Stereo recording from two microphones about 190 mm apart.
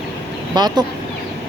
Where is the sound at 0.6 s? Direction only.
20° right (ahead or behind).